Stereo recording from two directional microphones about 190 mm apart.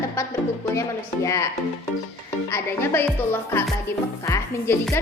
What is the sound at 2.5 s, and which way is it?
Speech, 10° left (ahead or behind).